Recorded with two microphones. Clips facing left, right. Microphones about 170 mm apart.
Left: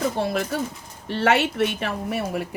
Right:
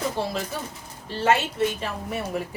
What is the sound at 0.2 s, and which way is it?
A woman's voice, 60° left (ahead or behind).